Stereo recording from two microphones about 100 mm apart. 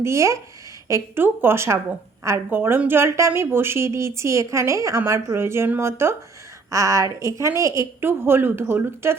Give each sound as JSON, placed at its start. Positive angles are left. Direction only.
{"t": 0.0, "sound": "a woman's voice", "side_deg": -30}